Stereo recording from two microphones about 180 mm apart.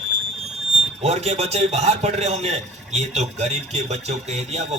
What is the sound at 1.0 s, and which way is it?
A man's voice, 35° right (ahead or behind).